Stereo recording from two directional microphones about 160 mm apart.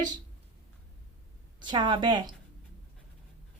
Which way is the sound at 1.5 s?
30° right (ahead or behind).